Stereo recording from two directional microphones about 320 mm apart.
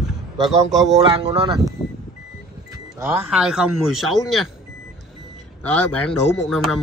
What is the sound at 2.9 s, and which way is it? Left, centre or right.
A man's voice, centre.